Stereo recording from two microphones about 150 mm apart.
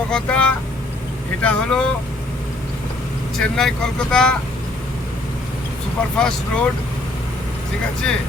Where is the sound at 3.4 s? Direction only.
5° left (ahead or behind).